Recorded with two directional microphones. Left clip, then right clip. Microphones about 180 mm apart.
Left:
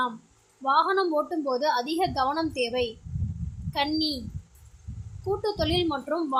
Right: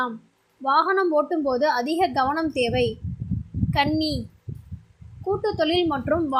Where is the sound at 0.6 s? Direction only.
15° right (ahead or behind).